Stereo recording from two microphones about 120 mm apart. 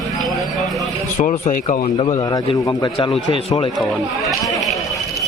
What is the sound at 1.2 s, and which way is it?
Speech, 90° left.